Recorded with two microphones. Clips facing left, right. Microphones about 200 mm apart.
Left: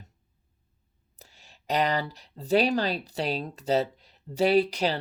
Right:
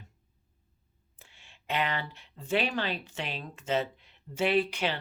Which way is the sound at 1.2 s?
40° left (ahead or behind).